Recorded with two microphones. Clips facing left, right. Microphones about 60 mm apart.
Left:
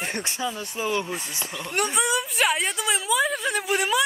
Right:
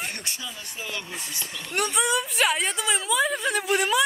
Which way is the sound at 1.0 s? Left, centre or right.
Centre.